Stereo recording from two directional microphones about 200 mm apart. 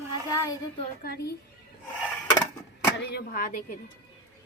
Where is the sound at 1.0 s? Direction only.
50° left (ahead or behind).